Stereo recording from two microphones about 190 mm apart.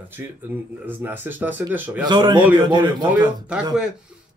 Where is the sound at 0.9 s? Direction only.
10° right (ahead or behind).